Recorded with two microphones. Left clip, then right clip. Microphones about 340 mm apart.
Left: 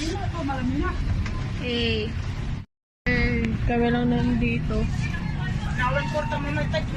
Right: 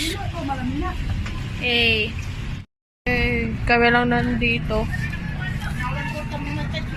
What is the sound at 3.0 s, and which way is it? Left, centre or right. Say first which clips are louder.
Music: right 3 dB; centre.